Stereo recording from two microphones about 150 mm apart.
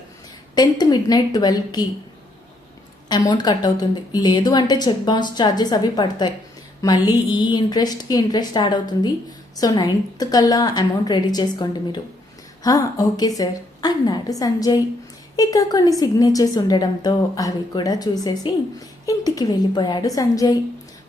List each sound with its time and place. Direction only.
0.5 s a woman's voice: 25° left (ahead or behind)
3.1 s a woman's voice: 30° left (ahead or behind)